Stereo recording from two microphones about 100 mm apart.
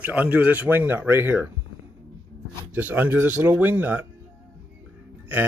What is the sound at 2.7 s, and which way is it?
Speech, 20° right (ahead or behind).